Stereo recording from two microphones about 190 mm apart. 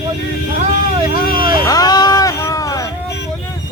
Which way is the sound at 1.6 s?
20° left (ahead or behind).